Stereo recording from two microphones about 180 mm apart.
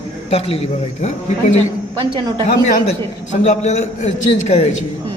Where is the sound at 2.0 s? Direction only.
25° right (ahead or behind).